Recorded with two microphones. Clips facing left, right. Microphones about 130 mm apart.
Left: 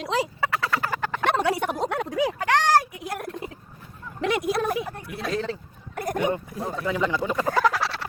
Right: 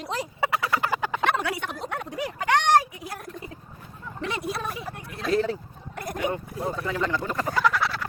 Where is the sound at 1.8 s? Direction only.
90° left.